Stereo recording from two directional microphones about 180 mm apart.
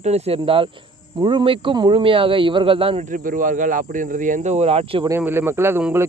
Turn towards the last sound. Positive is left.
turn(degrees=-10)  # may be behind; listen again after turning